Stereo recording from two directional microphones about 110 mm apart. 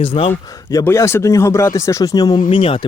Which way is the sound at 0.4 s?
35° left (ahead or behind).